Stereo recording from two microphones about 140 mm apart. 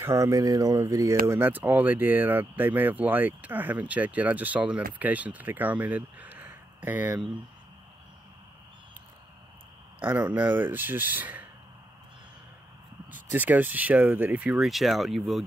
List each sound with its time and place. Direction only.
0.0 s speech: 20° right (ahead or behind)
9.9 s speech: 10° right (ahead or behind)
13.1 s speech: 10° right (ahead or behind)